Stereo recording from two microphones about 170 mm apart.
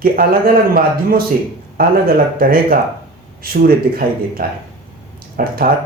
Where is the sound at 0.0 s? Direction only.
60° right (ahead or behind).